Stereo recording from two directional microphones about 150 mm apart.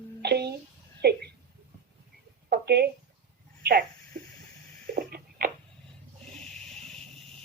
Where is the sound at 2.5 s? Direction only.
90° right.